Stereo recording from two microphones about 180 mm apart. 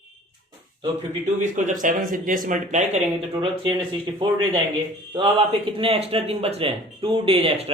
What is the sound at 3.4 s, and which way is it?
Speech, 25° right (ahead or behind).